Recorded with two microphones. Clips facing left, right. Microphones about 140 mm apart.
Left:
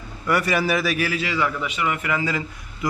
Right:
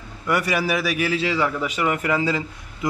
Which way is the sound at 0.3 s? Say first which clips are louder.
Left 1 dB; 15° right (ahead or behind).